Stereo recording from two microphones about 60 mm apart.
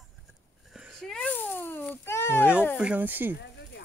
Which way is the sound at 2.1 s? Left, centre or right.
Left.